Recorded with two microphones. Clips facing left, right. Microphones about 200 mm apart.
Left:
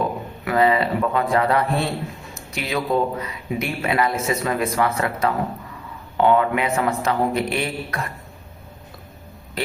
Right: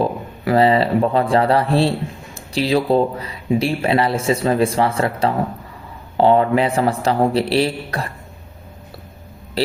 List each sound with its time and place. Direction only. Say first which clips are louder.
0.0 s speech: right 4 dB; 30° right (ahead or behind)
9.6 s speech: right 7 dB; 30° right (ahead or behind)